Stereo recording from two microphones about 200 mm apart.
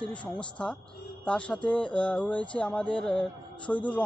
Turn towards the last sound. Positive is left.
turn(degrees=5)  # may be behind; listen again after turning